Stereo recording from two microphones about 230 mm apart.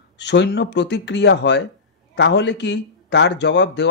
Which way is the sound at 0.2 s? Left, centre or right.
Left.